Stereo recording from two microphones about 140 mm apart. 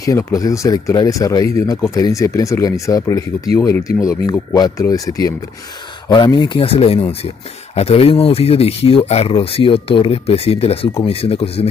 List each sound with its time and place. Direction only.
0.0 s speech: 25° left (ahead or behind); by 11.6 s 45° left (ahead or behind)